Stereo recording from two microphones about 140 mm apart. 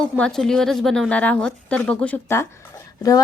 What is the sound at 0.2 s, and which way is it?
A woman's voice, 5° left (ahead or behind).